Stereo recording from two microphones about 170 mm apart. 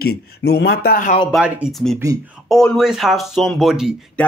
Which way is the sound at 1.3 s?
5° right (ahead or behind).